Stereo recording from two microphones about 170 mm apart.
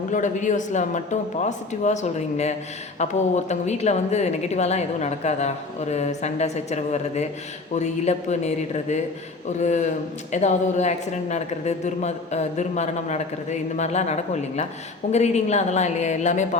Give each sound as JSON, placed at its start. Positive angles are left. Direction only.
{"t": 0.1, "sound": "a woman's voice", "side_deg": 45}